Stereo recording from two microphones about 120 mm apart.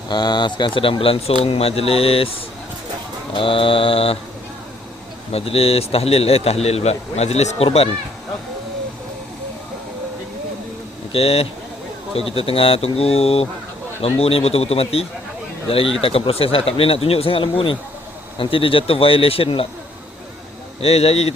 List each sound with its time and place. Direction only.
0.1 s speech: 35° left (ahead or behind)
5.3 s speech: 55° left (ahead or behind)
11.1 s speech: 55° left (ahead or behind)
20.8 s speech: 55° left (ahead or behind)